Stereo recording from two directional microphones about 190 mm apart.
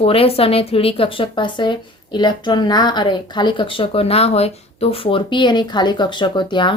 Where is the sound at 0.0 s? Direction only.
30° left (ahead or behind).